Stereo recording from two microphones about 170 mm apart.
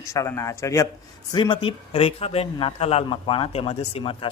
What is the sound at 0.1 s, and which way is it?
Speech, 20° left (ahead or behind).